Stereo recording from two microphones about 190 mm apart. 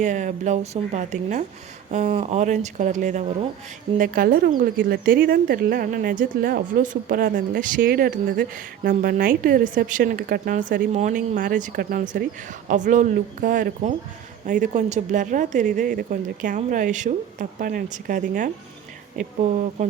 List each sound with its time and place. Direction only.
0.0 s speech: 40° right (ahead or behind)